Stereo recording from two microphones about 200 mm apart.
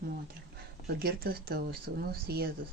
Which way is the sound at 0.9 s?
50° right (ahead or behind).